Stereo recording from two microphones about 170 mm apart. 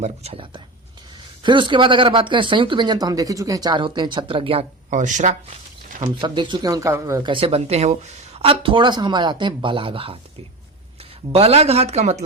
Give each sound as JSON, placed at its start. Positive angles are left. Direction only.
{"t": 0.0, "sound": "speech", "side_deg": -35}
{"t": 4.9, "sound": "speech", "side_deg": -45}
{"t": 6.1, "sound": "speech", "side_deg": -25}
{"t": 11.3, "sound": "speech", "side_deg": -35}